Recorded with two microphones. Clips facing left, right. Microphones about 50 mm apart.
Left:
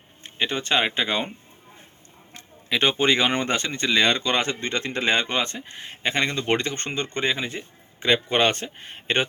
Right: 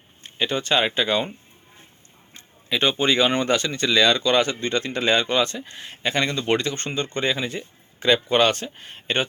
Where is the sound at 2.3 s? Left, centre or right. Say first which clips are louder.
Even; left.